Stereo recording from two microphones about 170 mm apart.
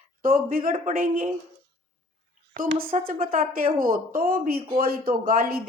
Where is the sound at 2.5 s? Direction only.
55° right (ahead or behind).